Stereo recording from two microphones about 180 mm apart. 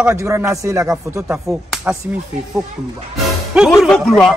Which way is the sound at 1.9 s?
5° right (ahead or behind).